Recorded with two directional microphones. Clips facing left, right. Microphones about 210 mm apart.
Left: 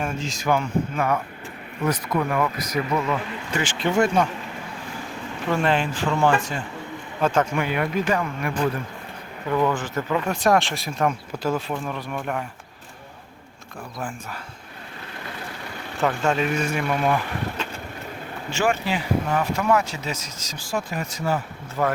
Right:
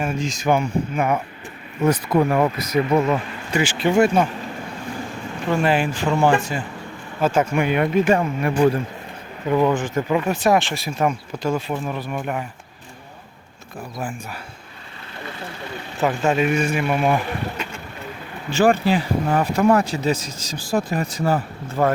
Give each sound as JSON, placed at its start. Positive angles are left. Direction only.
{"t": 0.0, "sound": "speech", "side_deg": -10}
{"t": 1.8, "sound": "speech", "side_deg": -30}
{"t": 3.5, "sound": "speech", "side_deg": -10}
{"t": 5.5, "sound": "speech", "side_deg": -5}
{"t": 10.2, "sound": "speech", "side_deg": -5}
{"t": 16.0, "sound": "speech", "side_deg": -10}
{"t": 16.9, "sound": "speech", "side_deg": -20}
{"t": 18.5, "sound": "speech", "side_deg": -35}